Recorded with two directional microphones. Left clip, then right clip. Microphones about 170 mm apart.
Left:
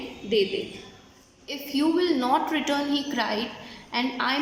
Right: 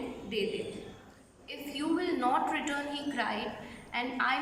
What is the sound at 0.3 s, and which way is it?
A woman's voice, 35° left (ahead or behind).